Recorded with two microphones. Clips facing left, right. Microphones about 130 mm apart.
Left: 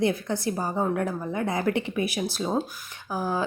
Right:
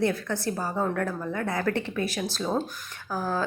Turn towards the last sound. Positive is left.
turn(degrees=10)  # may be behind; listen again after turning